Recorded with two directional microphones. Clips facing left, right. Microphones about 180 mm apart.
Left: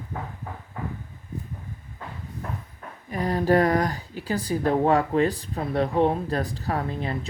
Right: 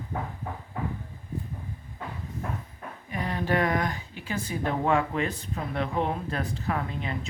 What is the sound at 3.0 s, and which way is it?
Speech, 35° left (ahead or behind).